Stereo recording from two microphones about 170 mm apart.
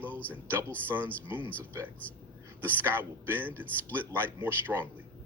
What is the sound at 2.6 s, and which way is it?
A man's voice, 10° right (ahead or behind).